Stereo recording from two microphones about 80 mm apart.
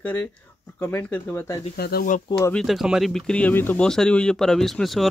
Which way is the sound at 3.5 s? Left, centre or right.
Left.